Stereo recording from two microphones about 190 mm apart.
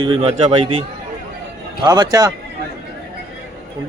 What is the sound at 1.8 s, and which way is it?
Speech, 20° right (ahead or behind).